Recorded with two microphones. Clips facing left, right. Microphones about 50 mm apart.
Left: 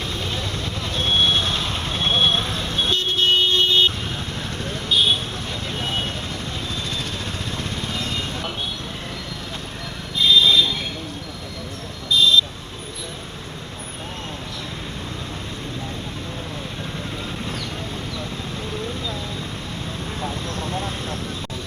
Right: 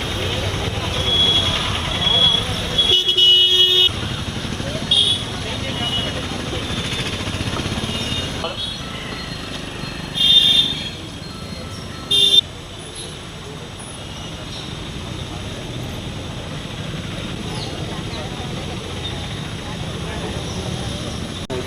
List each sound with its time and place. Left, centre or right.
0.0 s vehicle: right
10.2 s a sound: right
12.1 s buzzer: right
20.2 s vehicle: left